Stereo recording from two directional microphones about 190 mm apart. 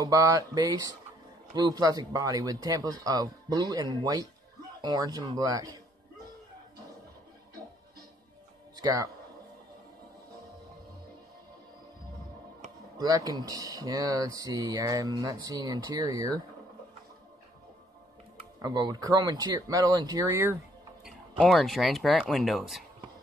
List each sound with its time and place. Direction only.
0.0 s speech: 15° right (ahead or behind)
8.7 s speech: 20° right (ahead or behind)
12.9 s speech: 20° right (ahead or behind)
18.6 s speech: 20° right (ahead or behind)
21.0 s speech: centre (ahead or behind)